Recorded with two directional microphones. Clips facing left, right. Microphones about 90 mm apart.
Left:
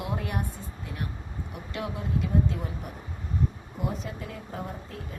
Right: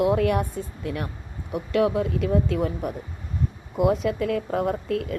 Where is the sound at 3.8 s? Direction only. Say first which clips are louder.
Right 12 dB; 90° right.